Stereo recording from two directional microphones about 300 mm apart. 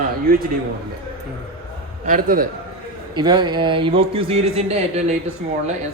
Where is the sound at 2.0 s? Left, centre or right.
Right.